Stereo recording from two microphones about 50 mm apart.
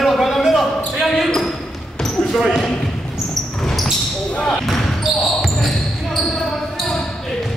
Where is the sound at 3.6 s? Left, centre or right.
Centre.